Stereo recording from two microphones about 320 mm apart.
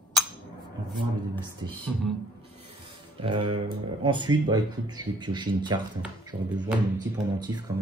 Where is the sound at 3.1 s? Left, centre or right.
Centre.